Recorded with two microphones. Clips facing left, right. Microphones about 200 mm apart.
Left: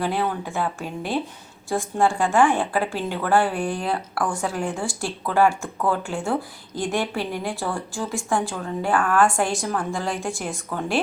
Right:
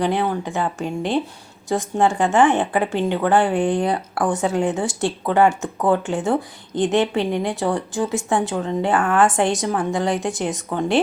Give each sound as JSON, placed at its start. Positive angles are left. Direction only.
{"t": 0.4, "sound": "a woman's voice", "side_deg": -15}